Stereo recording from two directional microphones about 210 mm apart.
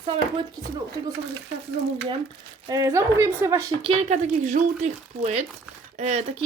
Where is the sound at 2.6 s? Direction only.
15° right (ahead or behind).